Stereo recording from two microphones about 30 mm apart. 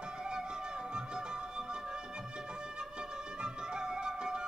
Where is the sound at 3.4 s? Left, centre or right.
Right.